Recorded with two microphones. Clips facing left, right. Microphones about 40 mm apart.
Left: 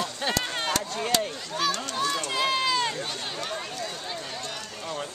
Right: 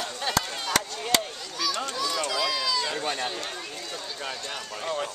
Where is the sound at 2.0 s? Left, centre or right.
Left.